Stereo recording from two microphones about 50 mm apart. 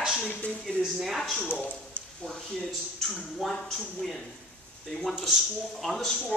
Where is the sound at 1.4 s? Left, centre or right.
Left.